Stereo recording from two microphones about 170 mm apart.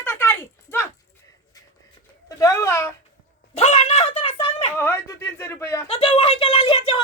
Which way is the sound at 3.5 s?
40° left (ahead or behind).